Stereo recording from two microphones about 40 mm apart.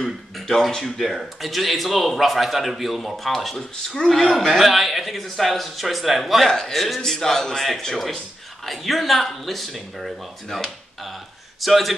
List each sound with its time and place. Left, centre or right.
0.0 s speech: centre
3.5 s speech: centre
4.1 s speech: centre
6.4 s speech: centre
11.6 s speech: centre